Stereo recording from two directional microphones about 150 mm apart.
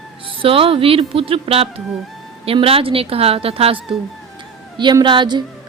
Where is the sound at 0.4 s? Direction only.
40° right (ahead or behind).